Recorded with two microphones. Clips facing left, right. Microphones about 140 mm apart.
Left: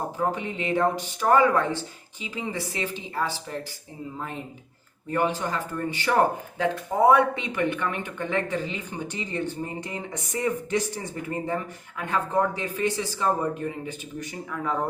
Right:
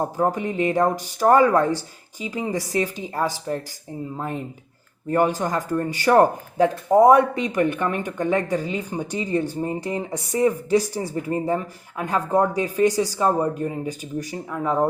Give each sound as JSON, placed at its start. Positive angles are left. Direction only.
{"t": 0.2, "sound": "speech", "side_deg": -40}
{"t": 5.1, "sound": "speech", "side_deg": -40}